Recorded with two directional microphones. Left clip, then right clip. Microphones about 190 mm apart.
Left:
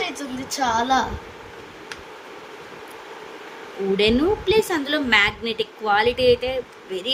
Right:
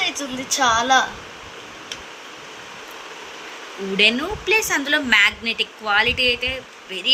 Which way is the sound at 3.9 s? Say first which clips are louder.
Right 1 dB; 10° left (ahead or behind).